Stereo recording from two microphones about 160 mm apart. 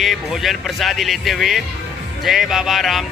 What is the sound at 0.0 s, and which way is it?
Speech, centre (ahead or behind).